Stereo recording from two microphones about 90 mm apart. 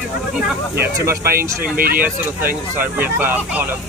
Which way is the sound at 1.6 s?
20° right (ahead or behind).